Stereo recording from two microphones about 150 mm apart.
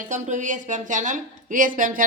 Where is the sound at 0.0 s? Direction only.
55° right (ahead or behind).